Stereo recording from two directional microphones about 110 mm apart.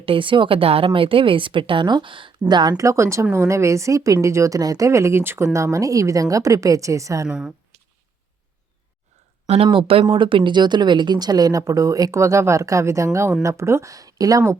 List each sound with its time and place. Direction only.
0.0 s a woman's voice: 55° right (ahead or behind)
2.7 s speech: 25° right (ahead or behind)
7.3 s speech: 5° right (ahead or behind)
9.7 s speech: 55° right (ahead or behind); by 14.6 s 30° right (ahead or behind)